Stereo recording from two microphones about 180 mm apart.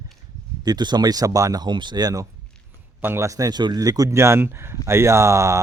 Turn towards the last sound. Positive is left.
turn(degrees=-15)  # may be behind; listen again after turning